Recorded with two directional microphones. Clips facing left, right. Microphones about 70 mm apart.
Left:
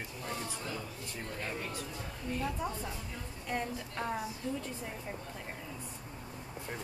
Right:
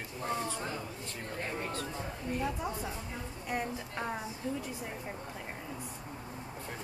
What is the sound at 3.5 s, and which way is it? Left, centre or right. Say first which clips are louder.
Speech: right 1 dB; centre.